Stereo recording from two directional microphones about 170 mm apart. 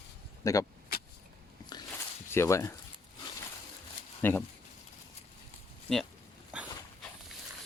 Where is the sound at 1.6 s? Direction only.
20° left (ahead or behind).